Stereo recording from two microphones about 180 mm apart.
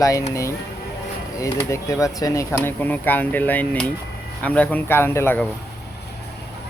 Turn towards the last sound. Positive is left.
turn(degrees=10)  # may be behind; listen again after turning